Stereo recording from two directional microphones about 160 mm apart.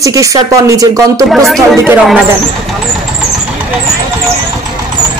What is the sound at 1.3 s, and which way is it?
Speech, centre (ahead or behind).